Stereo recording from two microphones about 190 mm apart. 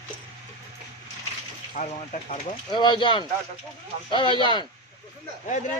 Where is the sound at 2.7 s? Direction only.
25° left (ahead or behind).